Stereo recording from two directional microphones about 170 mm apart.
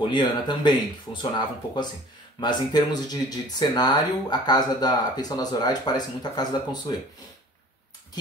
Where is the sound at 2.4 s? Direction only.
25° left (ahead or behind).